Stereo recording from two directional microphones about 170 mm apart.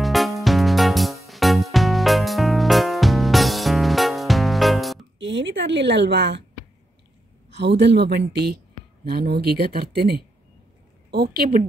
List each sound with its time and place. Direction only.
0.0 s music: centre (ahead or behind)
5.2 s a woman's voice: 90° right
7.5 s speech: 90° right; by 11.6 s 70° right (ahead or behind)